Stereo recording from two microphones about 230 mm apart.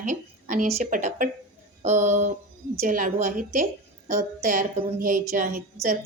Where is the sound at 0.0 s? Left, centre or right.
Right.